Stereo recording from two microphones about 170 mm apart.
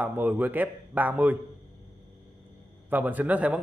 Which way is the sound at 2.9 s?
10° right (ahead or behind).